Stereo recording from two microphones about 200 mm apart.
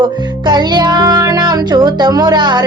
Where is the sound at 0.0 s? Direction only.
20° right (ahead or behind).